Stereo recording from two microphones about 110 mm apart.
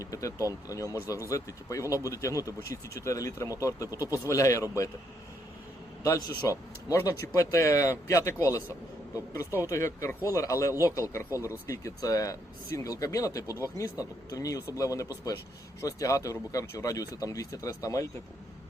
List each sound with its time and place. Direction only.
0.0 s speech: 30° left (ahead or behind)
6.1 s speech: 30° left (ahead or behind)